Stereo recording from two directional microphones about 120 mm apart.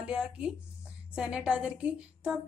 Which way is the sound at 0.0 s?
5° right (ahead or behind).